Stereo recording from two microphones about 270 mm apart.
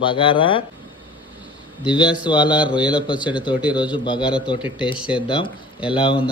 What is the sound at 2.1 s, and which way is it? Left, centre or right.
Speech, centre.